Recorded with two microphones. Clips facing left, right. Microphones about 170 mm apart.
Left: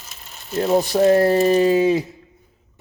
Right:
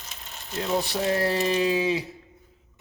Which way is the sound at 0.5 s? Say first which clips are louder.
Left 9 dB; 45° left (ahead or behind).